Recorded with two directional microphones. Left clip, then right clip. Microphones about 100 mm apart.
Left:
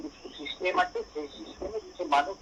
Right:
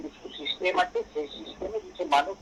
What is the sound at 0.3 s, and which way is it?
Speech, 20° right (ahead or behind).